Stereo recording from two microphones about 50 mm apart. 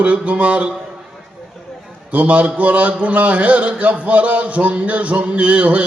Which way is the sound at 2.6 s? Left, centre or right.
Right.